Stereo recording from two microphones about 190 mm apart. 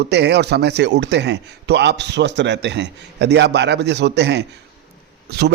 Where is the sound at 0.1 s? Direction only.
60° right (ahead or behind).